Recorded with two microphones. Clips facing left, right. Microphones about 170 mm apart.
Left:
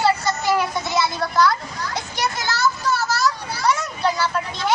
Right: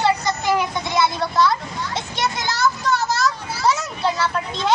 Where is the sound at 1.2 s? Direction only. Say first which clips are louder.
Even; centre (ahead or behind).